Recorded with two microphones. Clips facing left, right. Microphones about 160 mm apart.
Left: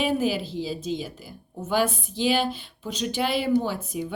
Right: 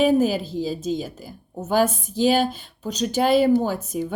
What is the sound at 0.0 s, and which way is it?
A woman's voice, 45° right (ahead or behind).